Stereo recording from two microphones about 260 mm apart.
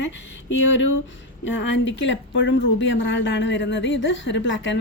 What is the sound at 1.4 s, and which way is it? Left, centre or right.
Speech, left.